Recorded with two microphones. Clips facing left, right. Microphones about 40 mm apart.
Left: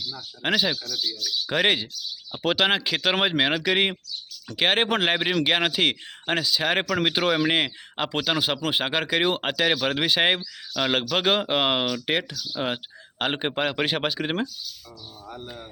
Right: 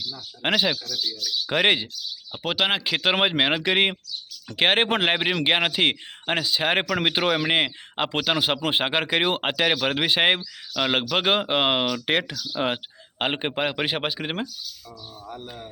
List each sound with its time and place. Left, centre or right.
0.4 s speech: right
0.9 s speech: centre
1.5 s speech: right
2.3 s speech: centre
6.4 s speech: right
13.3 s speech: centre